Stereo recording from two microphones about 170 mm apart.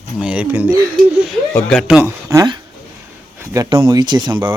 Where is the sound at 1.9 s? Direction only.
10° right (ahead or behind).